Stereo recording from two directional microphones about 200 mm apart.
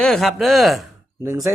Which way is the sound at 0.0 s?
Centre (ahead or behind).